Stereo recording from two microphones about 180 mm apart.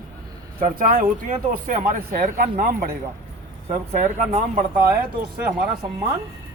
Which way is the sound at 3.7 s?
40° right (ahead or behind).